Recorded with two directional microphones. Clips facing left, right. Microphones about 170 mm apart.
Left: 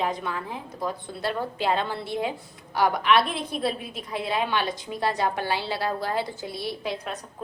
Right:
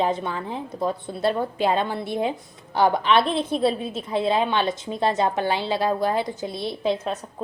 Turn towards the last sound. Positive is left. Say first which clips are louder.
# right 7 dB
turn(degrees=-25)  # may be behind; listen again after turning